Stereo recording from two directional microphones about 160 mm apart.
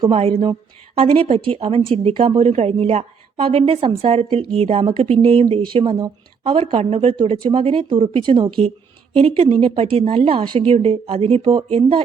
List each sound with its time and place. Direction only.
0.0 s a woman's voice: 35° right (ahead or behind)